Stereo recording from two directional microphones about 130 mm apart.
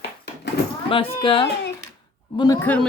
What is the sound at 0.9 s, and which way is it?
Speech, 45° left (ahead or behind).